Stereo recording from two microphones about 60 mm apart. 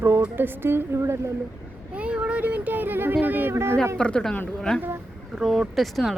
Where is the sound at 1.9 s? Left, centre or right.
Right.